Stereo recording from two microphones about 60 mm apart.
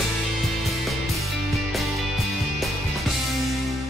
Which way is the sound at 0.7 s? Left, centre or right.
Centre.